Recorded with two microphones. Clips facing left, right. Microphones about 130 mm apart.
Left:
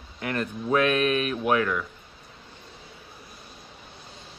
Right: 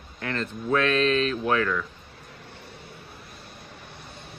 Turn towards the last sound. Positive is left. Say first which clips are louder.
# right 2 dB
turn(degrees=-65)  # may be behind; listen again after turning